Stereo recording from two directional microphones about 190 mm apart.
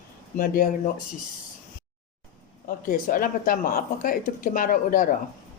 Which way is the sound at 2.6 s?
45° left (ahead or behind).